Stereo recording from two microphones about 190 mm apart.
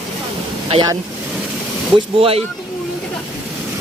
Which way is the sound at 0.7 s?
25° right (ahead or behind).